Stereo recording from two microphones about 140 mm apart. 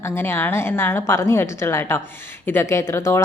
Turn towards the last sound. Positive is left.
turn(degrees=20)  # may be behind; listen again after turning